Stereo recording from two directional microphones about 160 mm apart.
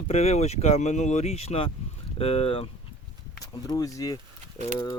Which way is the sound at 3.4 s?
20° left (ahead or behind).